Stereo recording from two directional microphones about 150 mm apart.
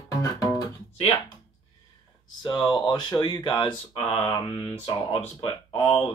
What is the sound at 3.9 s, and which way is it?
Speech, 40° left (ahead or behind).